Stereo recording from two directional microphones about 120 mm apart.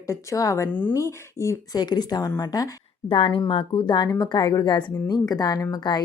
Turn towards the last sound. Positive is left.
turn(degrees=35)  # may be behind; listen again after turning